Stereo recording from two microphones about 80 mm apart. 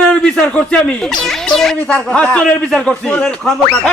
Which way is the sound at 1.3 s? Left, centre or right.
Centre.